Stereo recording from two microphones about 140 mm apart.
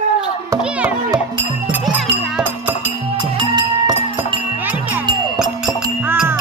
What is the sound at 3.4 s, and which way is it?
Music, 35° right (ahead or behind).